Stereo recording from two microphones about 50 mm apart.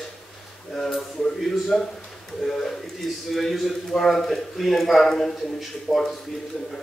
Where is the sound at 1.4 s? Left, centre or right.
Centre.